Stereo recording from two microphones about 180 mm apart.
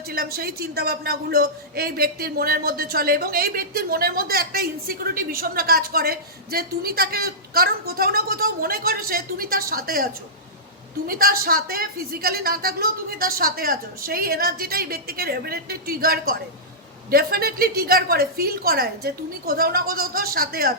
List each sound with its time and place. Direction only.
0.1 s speech: 60° right (ahead or behind)